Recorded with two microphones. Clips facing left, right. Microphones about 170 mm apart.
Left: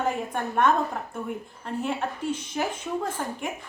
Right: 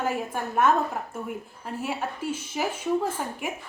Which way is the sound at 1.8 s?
5° right (ahead or behind).